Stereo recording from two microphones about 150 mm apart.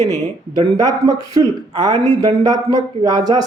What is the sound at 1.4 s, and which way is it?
Speech, 25° right (ahead or behind).